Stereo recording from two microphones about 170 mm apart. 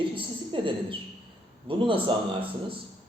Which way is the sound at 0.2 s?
30° right (ahead or behind).